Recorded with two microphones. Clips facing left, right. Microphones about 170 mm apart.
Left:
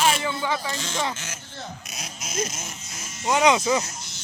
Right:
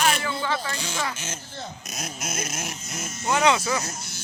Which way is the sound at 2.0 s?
55° right (ahead or behind).